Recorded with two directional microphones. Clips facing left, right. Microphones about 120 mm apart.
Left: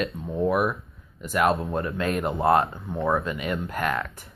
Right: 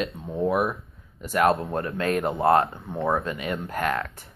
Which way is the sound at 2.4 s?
20° left (ahead or behind).